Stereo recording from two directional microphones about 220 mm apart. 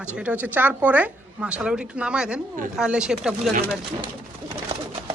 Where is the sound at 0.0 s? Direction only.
5° right (ahead or behind).